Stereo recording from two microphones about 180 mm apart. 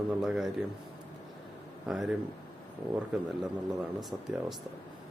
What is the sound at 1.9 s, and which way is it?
Speech, 5° right (ahead or behind).